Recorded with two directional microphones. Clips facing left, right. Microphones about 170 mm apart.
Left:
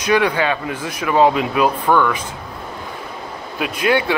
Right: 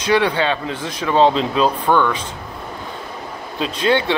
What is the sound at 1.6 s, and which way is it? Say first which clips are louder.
Speech: left 1 dB; 5° left (ahead or behind).